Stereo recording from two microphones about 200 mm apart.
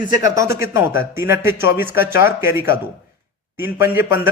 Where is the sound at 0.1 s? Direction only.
15° right (ahead or behind).